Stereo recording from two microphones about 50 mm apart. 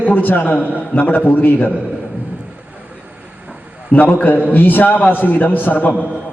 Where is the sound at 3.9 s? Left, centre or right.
Left.